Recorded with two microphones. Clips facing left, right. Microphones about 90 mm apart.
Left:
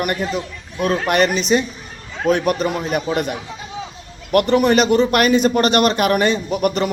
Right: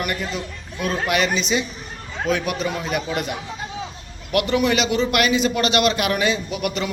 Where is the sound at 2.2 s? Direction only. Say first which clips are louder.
Left 6 dB; 45° left (ahead or behind).